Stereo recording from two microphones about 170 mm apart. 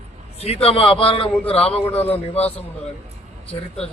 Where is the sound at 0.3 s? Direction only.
35° left (ahead or behind).